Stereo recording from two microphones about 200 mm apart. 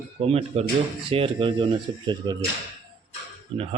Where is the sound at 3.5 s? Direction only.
30° right (ahead or behind).